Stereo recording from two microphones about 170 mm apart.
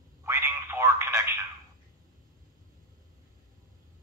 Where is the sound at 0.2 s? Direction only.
15° right (ahead or behind).